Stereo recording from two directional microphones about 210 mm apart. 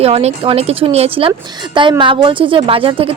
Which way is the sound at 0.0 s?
30° right (ahead or behind).